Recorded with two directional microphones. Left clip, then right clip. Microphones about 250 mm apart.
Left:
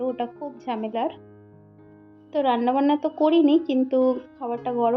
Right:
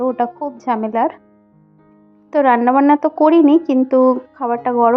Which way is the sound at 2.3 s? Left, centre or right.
Right.